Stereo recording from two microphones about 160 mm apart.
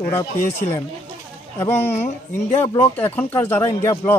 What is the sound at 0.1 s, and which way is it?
Speech, 15° left (ahead or behind).